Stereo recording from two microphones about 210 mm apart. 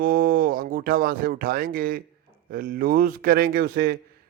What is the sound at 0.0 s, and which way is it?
Speech, 45° right (ahead or behind).